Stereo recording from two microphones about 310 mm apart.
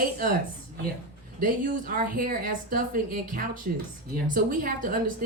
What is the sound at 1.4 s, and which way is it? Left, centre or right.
A woman's voice, right.